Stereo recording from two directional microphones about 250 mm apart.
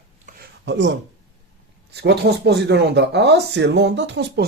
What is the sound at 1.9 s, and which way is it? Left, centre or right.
Speech, right.